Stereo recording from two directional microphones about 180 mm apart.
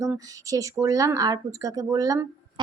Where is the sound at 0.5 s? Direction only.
20° right (ahead or behind).